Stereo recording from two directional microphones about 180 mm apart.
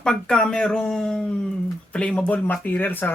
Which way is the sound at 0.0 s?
5° left (ahead or behind).